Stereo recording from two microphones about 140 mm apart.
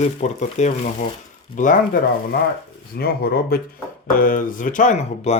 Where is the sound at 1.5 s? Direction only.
65° left (ahead or behind).